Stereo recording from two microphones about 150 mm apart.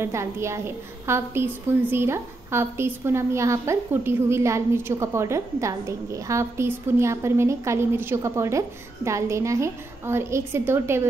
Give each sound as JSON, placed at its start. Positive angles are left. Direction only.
{"t": 0.0, "sound": "a woman's voice", "side_deg": -20}